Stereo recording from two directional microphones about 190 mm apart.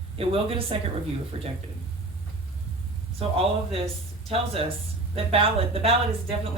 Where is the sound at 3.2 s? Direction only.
30° right (ahead or behind).